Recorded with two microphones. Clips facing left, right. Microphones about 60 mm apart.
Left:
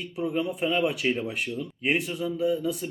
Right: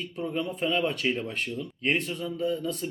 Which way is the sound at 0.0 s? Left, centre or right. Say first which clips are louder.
Left 3 dB; centre.